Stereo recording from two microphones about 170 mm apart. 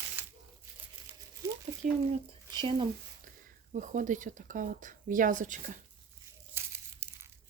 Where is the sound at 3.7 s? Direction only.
50° right (ahead or behind).